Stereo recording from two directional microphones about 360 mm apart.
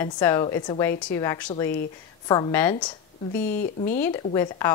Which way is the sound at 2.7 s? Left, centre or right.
Left.